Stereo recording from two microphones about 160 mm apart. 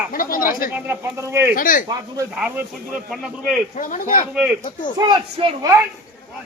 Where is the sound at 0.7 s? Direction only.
10° right (ahead or behind).